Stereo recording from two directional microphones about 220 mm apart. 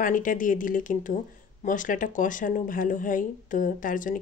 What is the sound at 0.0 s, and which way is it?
Speech, 35° left (ahead or behind).